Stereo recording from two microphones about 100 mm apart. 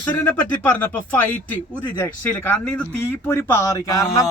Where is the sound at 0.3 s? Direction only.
20° left (ahead or behind).